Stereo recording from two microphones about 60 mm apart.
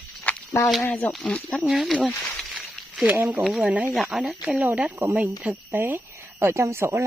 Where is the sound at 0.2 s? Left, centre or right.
Left.